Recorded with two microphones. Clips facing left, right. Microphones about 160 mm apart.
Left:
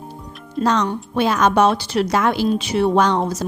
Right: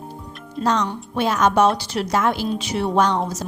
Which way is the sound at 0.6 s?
90° left.